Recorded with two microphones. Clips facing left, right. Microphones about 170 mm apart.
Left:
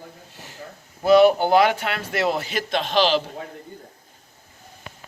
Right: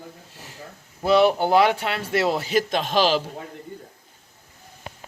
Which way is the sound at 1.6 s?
30° right (ahead or behind).